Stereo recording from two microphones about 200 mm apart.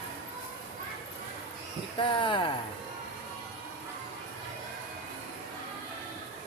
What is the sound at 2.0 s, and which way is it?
Speech, 25° left (ahead or behind).